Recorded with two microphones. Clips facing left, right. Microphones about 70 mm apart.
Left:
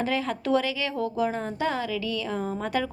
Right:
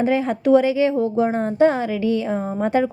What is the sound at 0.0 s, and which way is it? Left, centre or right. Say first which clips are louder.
Speech: right 8 dB; right.